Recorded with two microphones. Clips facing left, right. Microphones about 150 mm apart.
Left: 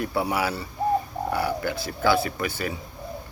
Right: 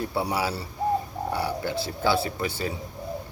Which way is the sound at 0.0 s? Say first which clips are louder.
Left 2 dB; 30° right (ahead or behind).